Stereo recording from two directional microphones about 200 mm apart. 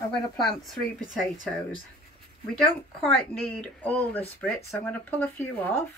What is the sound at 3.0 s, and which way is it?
Speech, 5° left (ahead or behind).